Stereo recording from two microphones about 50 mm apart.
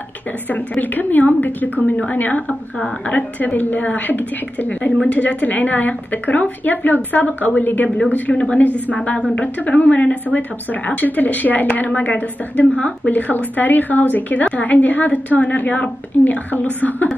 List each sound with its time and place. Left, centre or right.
0.5 s speech: left
8.3 s speech: left